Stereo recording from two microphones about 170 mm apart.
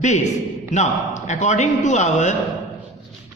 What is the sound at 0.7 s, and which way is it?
A man's voice, 45° left (ahead or behind).